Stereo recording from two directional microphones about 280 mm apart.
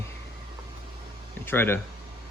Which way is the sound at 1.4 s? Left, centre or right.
Centre.